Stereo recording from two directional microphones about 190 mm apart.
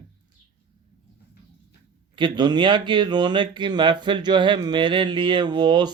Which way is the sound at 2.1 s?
25° right (ahead or behind).